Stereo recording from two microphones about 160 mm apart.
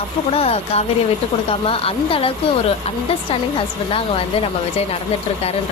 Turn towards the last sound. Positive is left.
turn(degrees=35)  # may be behind; listen again after turning